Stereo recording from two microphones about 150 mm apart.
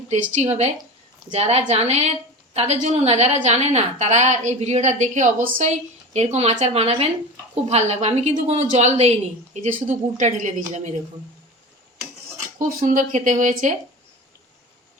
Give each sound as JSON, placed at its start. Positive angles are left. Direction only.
{"t": 0.1, "sound": "a woman's voice", "side_deg": -45}
{"t": 12.5, "sound": "speech", "side_deg": -65}